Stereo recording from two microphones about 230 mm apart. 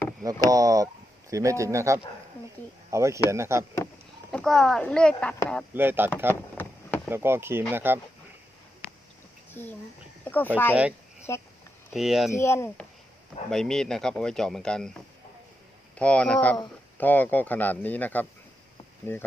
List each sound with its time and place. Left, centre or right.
0.3 s speech: centre
4.3 s a man's voice: centre
5.7 s speech: centre
6.6 s a sound: centre
7.1 s speech: centre
9.5 s speech: centre
11.9 s a man's voice: centre
12.4 s a man's voice: centre